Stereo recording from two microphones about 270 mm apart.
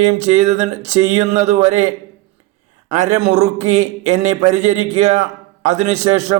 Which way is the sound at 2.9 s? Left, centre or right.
Right.